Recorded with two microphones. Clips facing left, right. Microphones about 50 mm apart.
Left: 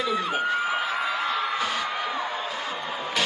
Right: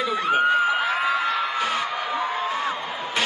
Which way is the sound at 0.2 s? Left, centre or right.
Right.